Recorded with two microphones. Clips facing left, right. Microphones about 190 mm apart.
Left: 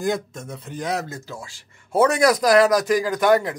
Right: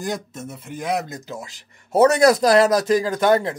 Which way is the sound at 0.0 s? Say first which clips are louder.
Left 3 dB; centre (ahead or behind).